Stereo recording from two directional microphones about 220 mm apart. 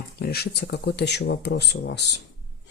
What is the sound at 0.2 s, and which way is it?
Speech, 45° left (ahead or behind).